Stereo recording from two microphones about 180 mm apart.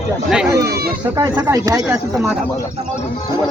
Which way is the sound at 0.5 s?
65° right (ahead or behind).